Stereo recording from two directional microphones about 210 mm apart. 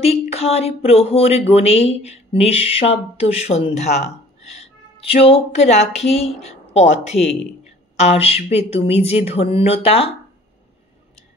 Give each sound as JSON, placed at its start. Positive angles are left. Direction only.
{"t": 0.0, "sound": "speech", "side_deg": 30}